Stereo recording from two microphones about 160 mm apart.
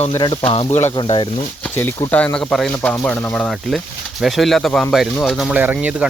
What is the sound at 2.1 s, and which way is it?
Speech, 10° left (ahead or behind).